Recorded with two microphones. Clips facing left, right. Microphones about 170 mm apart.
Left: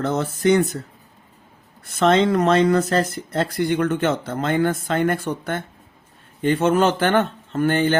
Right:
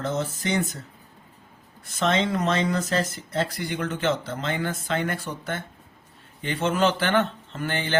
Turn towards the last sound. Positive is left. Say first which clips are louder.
# left 9 dB
turn(degrees=50)  # may be behind; listen again after turning